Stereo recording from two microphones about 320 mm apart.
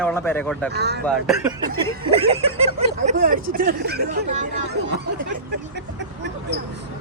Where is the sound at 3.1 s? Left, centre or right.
Right.